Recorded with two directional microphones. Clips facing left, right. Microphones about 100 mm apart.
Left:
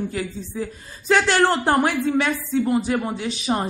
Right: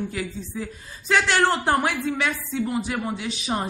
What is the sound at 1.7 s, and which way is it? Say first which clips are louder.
A woman's voice: left 4 dB; 45° left (ahead or behind).